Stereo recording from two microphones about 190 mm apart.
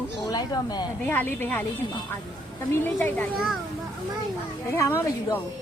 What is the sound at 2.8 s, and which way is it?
Speech, 10° left (ahead or behind).